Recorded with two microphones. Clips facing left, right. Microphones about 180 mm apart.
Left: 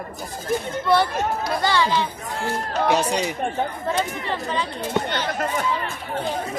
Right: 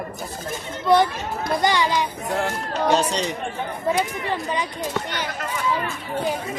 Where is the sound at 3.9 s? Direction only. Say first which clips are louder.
Right 2 dB; 15° right (ahead or behind).